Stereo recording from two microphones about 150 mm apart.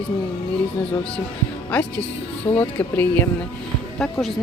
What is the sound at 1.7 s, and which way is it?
A woman's voice, 10° left (ahead or behind).